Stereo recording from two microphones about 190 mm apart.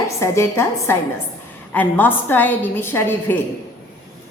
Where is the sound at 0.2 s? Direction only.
15° left (ahead or behind).